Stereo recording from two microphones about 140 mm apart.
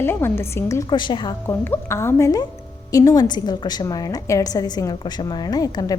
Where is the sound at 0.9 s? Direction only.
35° left (ahead or behind).